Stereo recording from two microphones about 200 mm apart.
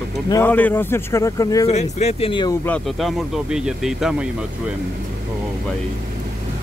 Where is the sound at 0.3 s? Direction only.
10° left (ahead or behind).